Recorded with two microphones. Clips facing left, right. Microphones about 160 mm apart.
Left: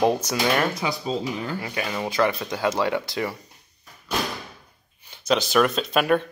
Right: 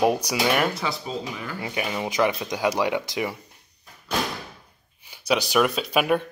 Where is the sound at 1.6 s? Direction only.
20° right (ahead or behind).